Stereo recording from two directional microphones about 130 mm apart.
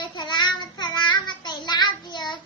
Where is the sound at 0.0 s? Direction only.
35° left (ahead or behind).